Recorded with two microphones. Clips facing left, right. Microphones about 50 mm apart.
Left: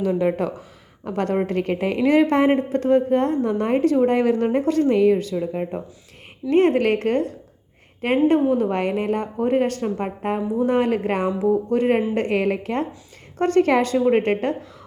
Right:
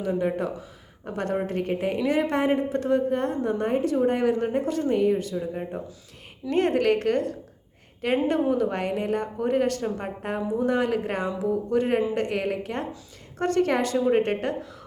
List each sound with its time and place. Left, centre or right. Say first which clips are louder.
0.0 s a woman's voice: left 5 dB; left
6.5 s a woman's voice: left 5 dB; left